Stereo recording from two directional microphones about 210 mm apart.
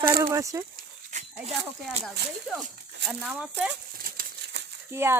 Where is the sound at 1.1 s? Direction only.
35° right (ahead or behind).